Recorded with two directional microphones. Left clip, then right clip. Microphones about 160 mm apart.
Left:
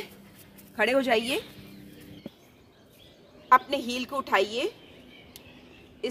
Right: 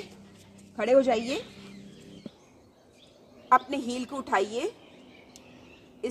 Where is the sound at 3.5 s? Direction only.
5° right (ahead or behind).